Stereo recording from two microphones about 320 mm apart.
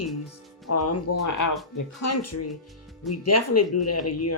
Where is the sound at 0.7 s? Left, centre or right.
Left.